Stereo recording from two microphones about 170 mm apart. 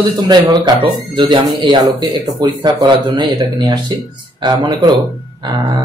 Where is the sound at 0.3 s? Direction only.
25° right (ahead or behind).